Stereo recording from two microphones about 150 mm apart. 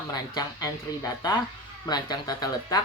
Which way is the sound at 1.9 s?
25° left (ahead or behind).